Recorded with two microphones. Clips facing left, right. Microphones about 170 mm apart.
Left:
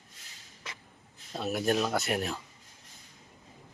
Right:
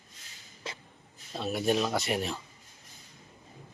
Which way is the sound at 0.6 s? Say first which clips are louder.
Right 5 dB; 30° right (ahead or behind).